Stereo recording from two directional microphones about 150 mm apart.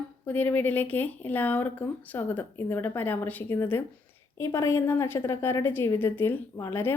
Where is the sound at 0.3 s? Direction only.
10° left (ahead or behind).